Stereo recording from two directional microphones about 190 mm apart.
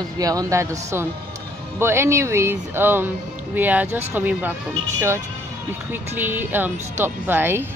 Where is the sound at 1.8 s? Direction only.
15° right (ahead or behind).